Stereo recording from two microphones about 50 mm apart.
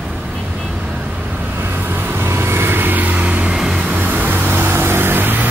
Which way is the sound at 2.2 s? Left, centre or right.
Right.